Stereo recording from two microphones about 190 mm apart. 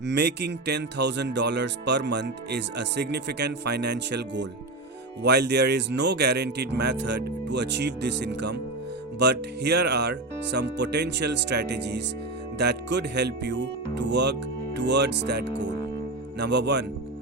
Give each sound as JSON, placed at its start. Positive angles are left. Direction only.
{"t": 0.0, "sound": "speech", "side_deg": -60}